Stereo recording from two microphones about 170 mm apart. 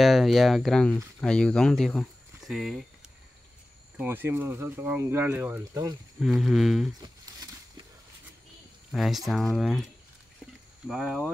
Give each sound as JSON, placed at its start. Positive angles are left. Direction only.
{"t": 0.0, "sound": "speech", "side_deg": 0}
{"t": 4.0, "sound": "speech", "side_deg": -10}
{"t": 6.1, "sound": "speech", "side_deg": 0}
{"t": 7.0, "sound": "a sound", "side_deg": -25}
{"t": 8.9, "sound": "speech", "side_deg": 0}
{"t": 10.9, "sound": "speech", "side_deg": 0}